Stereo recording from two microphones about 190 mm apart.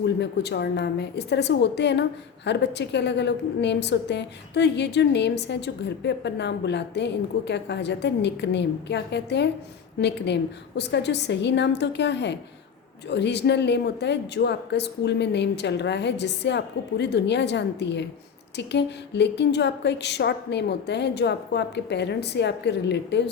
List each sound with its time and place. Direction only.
0.0 s a woman's voice: 60° left (ahead or behind)